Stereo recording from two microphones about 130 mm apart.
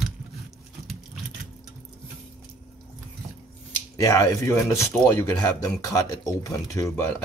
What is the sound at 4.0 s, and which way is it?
Speech, 25° left (ahead or behind).